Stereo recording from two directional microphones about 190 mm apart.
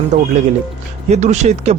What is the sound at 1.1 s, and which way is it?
Speech, 40° right (ahead or behind).